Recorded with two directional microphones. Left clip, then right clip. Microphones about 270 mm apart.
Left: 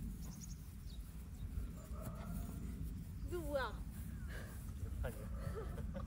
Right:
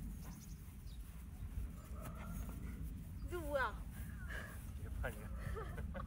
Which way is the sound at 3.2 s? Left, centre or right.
Centre.